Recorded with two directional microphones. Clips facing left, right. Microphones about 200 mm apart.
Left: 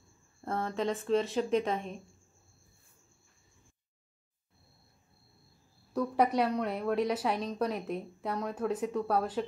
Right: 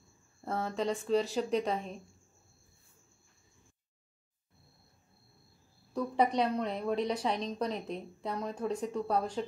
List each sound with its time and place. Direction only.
0.5 s a woman's voice: centre (ahead or behind)
6.3 s a woman's voice: 5° left (ahead or behind)